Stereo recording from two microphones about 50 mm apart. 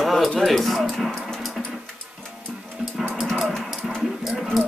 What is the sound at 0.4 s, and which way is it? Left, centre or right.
Speech, centre.